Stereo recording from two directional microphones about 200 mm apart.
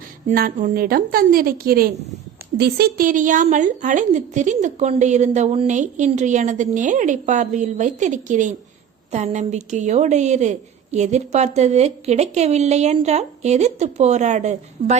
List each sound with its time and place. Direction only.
0.3 s a woman's voice: 45° right (ahead or behind)